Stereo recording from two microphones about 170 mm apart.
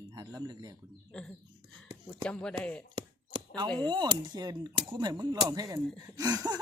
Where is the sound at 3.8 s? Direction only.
25° right (ahead or behind).